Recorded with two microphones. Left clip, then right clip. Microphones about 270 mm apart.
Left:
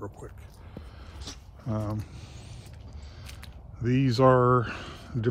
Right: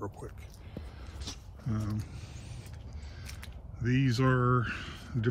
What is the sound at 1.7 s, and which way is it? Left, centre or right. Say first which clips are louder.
Speech: left 6 dB; centre.